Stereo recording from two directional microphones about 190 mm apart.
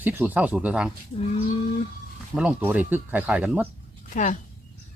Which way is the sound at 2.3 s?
5° right (ahead or behind).